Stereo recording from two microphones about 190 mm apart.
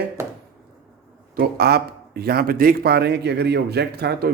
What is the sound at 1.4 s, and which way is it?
Speech, 55° right (ahead or behind).